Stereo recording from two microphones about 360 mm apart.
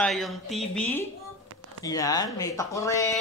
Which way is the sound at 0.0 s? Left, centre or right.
Centre.